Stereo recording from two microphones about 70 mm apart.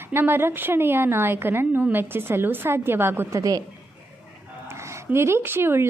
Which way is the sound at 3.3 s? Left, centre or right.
Right.